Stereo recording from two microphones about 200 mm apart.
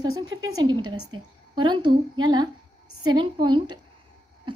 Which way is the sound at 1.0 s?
20° right (ahead or behind).